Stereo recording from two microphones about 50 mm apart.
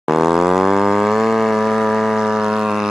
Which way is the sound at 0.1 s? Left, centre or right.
Centre.